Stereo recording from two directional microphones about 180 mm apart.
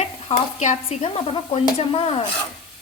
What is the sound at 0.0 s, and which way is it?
Stir, 35° left (ahead or behind).